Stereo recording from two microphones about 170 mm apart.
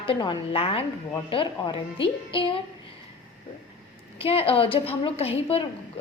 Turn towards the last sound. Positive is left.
turn(degrees=35)  # may be behind; listen again after turning